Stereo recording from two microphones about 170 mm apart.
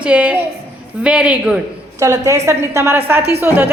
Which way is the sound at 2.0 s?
20° right (ahead or behind).